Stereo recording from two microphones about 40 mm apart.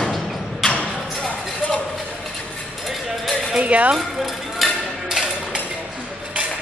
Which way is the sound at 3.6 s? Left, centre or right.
Right.